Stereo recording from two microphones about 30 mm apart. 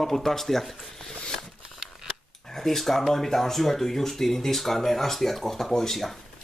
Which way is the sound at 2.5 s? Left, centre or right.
Centre.